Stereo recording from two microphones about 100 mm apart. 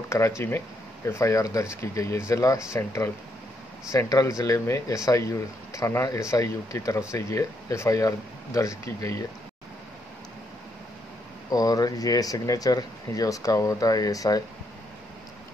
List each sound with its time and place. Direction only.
0.1 s speech: 35° left (ahead or behind)
11.5 s speech: 40° left (ahead or behind)